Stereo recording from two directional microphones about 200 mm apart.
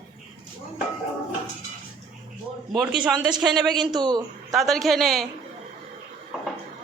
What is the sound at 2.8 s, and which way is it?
Speech, 5° right (ahead or behind).